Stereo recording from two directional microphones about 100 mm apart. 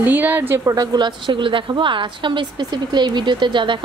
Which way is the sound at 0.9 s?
50° right (ahead or behind).